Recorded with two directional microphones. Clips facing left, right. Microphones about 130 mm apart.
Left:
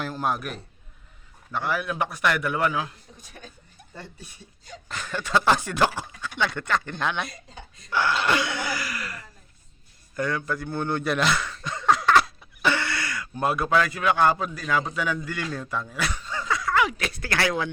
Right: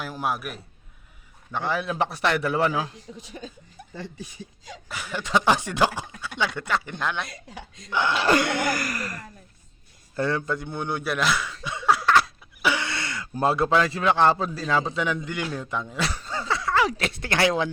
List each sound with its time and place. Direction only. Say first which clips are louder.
0.0 s a man's voice: left 1 dB; 5° right (ahead or behind)
1.5 s a man's voice: right 1 dB; 25° right (ahead or behind)
3.2 s speech: right 7 dB; 90° right
4.9 s speech: even; 10° right (ahead or behind)
7.3 s speech: right 3 dB; 90° right
7.9 s a man's voice: even; 20° right (ahead or behind)
8.2 s speech: right 3 dB; 40° right (ahead or behind)
8.4 s a sound: right 5 dB; 55° right (ahead or behind)
10.2 s speech: right 2 dB; 30° right (ahead or behind); by 12.3 s centre (ahead or behind)
12.6 s a sound: left 1 dB; 15° right (ahead or behind)
13.3 s a man's voice: right 2 dB; 30° right (ahead or behind)